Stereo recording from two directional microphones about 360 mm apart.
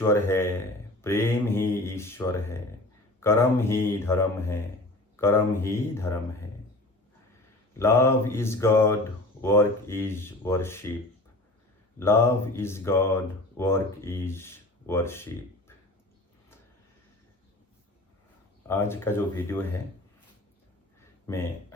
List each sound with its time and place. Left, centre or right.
0.0 s speech: centre
7.8 s speech: centre
11.9 s speech: centre
18.7 s speech: centre
21.3 s speech: centre